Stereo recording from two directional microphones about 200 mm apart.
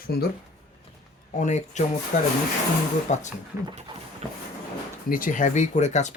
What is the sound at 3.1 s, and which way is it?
Speech, 35° left (ahead or behind).